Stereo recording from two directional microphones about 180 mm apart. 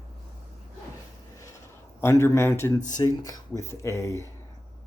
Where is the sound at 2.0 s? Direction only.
15° left (ahead or behind).